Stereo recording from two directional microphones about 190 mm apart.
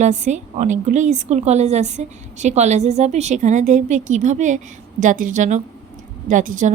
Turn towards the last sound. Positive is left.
turn(degrees=-40)  # may be behind; listen again after turning